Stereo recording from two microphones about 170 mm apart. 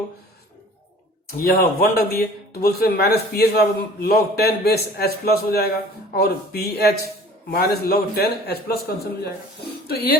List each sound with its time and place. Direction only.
1.3 s a man's voice: 65° left (ahead or behind)
9.8 s speech: 65° left (ahead or behind)